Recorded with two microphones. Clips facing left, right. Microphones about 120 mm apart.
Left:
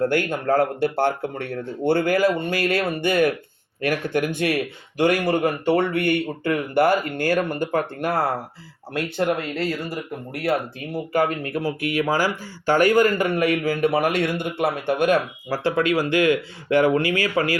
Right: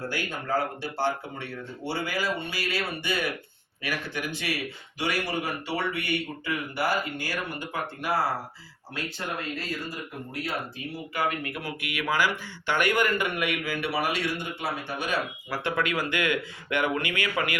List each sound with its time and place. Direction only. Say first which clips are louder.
0.0 s speech: left 11 dB; 55° left (ahead or behind)
10.9 s speech: left 8 dB; 45° left (ahead or behind)
15.4 s speech: left 7 dB; 35° left (ahead or behind)